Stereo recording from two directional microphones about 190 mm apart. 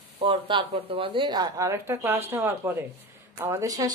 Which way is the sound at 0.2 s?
30° right (ahead or behind).